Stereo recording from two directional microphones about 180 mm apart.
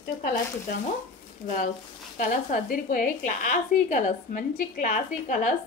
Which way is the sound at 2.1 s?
50° left (ahead or behind).